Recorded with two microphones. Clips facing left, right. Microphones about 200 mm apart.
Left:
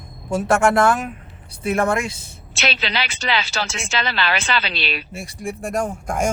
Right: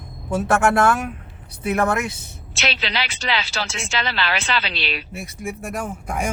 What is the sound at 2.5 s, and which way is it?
Speech, 50° left (ahead or behind).